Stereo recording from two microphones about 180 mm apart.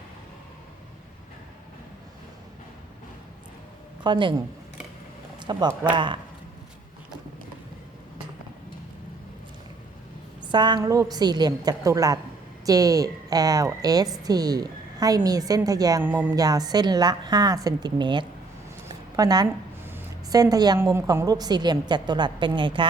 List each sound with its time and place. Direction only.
4.0 s a woman's voice: 25° right (ahead or behind)
5.4 s a woman's voice: 25° right (ahead or behind)
10.4 s a woman's voice: 25° right (ahead or behind)
16.3 s a woman's voice: 20° right (ahead or behind)
19.1 s a sound: 20° right (ahead or behind)
19.9 s a woman's voice: 15° right (ahead or behind)